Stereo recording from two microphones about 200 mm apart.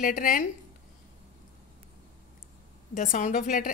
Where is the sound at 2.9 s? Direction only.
45° left (ahead or behind).